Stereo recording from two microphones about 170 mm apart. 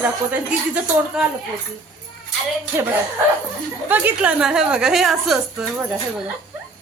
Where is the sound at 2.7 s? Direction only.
15° right (ahead or behind).